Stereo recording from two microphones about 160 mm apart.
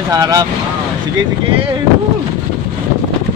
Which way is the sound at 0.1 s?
20° right (ahead or behind).